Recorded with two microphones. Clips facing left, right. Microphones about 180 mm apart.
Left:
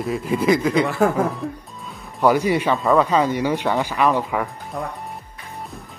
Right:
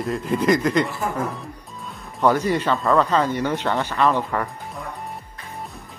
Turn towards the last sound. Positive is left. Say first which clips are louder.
# left 2 dB
turn(degrees=5)  # may be behind; listen again after turning